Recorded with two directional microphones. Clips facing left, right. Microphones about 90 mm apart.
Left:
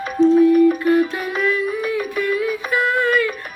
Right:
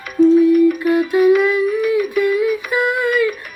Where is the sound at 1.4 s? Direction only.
15° right (ahead or behind).